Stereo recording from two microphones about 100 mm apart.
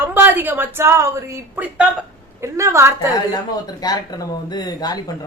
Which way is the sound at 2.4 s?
30° right (ahead or behind).